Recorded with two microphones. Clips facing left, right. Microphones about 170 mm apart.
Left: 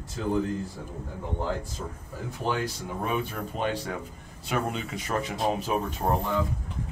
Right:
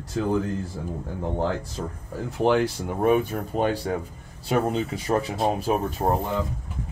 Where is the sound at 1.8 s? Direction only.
70° right (ahead or behind); by 6.2 s 35° right (ahead or behind).